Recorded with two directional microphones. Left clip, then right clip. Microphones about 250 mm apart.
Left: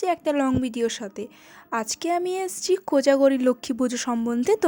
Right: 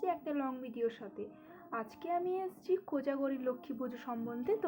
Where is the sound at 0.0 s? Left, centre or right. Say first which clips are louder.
Left 13 dB; left.